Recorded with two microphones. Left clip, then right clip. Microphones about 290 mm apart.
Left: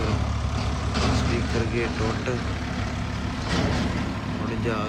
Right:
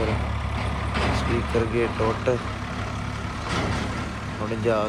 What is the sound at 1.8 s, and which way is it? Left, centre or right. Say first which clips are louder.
Speech: right 3 dB; right.